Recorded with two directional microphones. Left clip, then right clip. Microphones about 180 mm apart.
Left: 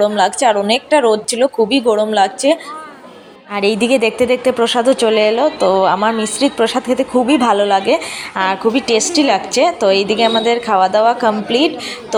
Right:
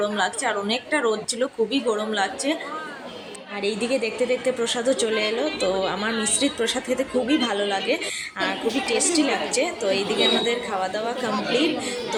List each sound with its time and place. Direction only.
0.0 s a woman's voice: 35° left (ahead or behind)